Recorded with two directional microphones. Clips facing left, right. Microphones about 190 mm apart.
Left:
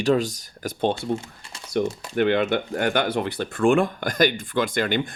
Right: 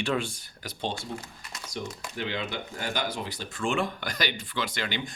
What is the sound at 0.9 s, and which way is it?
Speech, 25° left (ahead or behind).